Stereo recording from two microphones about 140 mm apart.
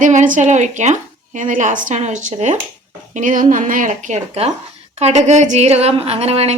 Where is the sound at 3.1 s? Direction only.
70° right (ahead or behind); by 6.5 s 50° right (ahead or behind).